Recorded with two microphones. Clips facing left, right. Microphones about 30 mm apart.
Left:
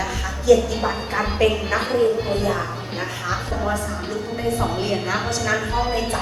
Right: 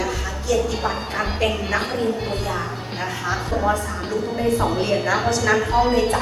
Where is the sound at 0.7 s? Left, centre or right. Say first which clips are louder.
Left 1 dB; centre.